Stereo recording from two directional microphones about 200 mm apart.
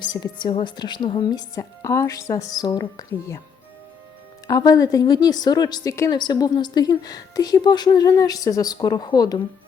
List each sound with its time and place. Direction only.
0.0 s a woman's voice: 20° left (ahead or behind)
4.4 s a woman's voice: 20° left (ahead or behind)